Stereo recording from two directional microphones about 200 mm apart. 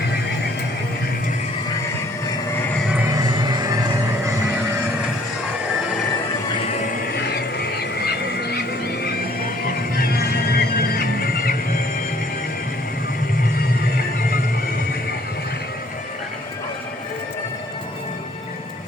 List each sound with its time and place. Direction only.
3.2 s music: 20° right (ahead or behind)
7.1 s a sound: 55° left (ahead or behind)
10.5 s music: 50° left (ahead or behind)